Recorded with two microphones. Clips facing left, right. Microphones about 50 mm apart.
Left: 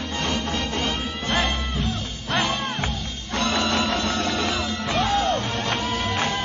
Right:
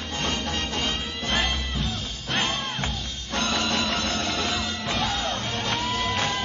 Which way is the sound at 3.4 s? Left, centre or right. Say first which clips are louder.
Left 3 dB; left.